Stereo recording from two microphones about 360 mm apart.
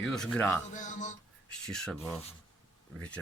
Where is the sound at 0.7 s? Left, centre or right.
Centre.